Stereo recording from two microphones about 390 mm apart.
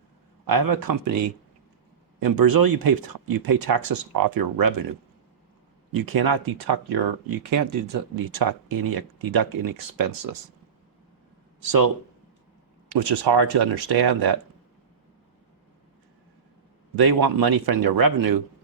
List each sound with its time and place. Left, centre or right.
0.4 s speech: right
2.2 s speech: right
5.9 s speech: right
7.5 s speech: right
11.6 s speech: right
12.9 s speech: right
16.9 s speech: right